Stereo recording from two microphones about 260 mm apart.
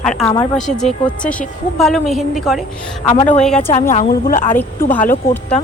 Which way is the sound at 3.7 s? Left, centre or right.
Left.